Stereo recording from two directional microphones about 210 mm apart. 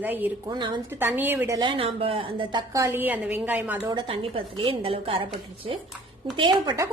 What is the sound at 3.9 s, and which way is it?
A woman's voice, 25° right (ahead or behind).